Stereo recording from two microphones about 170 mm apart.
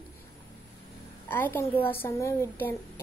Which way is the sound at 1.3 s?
10° left (ahead or behind).